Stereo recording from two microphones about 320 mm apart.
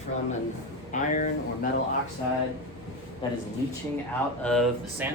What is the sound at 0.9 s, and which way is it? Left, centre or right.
Speech, left.